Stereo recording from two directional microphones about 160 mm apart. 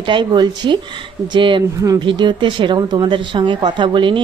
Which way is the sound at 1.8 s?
20° right (ahead or behind).